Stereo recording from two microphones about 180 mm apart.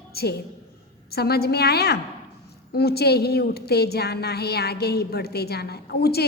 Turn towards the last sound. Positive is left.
turn(degrees=60)  # may be behind; listen again after turning